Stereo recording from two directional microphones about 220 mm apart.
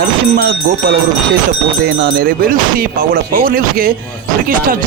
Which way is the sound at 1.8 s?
40° right (ahead or behind).